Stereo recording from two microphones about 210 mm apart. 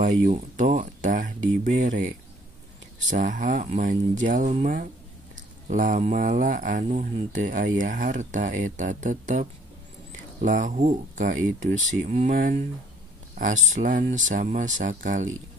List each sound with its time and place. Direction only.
0.0 s speech: 35° right (ahead or behind)